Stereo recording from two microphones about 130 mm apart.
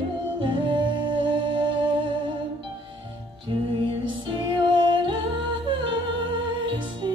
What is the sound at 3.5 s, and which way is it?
Music, 40° right (ahead or behind).